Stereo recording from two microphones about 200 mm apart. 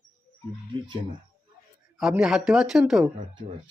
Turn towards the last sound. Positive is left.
turn(degrees=0)  # may be behind; listen again after turning